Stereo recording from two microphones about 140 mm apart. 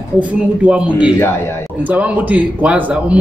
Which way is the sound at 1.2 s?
20° left (ahead or behind).